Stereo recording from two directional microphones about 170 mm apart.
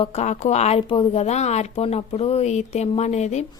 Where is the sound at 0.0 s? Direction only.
40° left (ahead or behind).